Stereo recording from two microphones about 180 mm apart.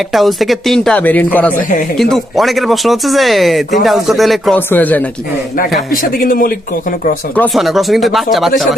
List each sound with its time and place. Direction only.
0.1 s speech: centre (ahead or behind)
5.9 s a man's voice: 55° left (ahead or behind)
7.3 s speech: 5° left (ahead or behind)